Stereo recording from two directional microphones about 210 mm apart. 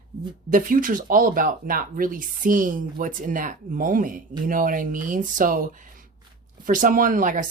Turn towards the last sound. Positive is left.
turn(degrees=-40)  # may be behind; listen again after turning